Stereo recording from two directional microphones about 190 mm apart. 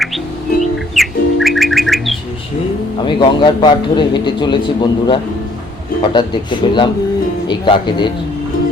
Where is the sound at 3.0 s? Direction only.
25° left (ahead or behind).